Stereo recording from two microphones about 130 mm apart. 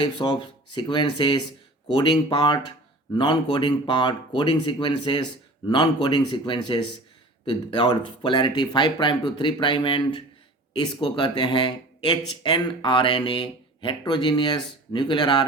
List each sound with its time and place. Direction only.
0.0 s speech: 35° left (ahead or behind)